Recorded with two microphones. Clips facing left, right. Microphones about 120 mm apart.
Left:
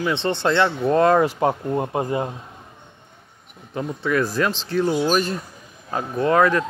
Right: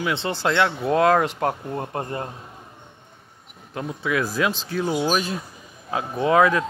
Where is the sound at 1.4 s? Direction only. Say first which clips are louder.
Left 4 dB; 20° left (ahead or behind).